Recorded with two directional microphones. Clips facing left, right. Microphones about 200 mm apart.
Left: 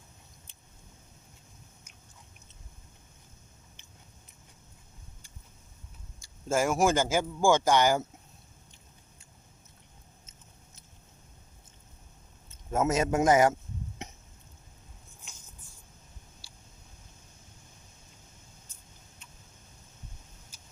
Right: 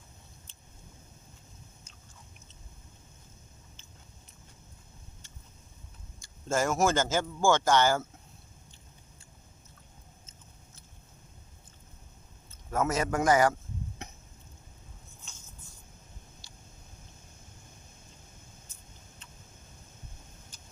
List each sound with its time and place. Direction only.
6.5 s speech: 10° left (ahead or behind)
12.5 s a man's voice: 20° left (ahead or behind)
14.0 s a sound: 20° left (ahead or behind)